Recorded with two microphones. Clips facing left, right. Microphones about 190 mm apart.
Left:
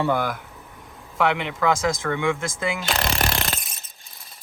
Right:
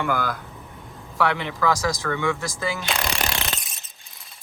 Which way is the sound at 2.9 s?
45° left (ahead or behind).